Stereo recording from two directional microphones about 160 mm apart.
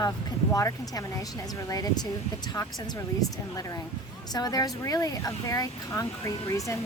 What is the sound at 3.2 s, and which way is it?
Speech, 20° left (ahead or behind).